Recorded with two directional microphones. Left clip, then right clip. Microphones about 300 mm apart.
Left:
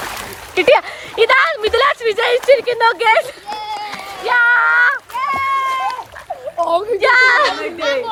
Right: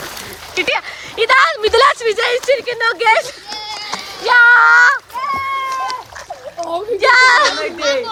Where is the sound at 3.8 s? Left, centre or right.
Centre.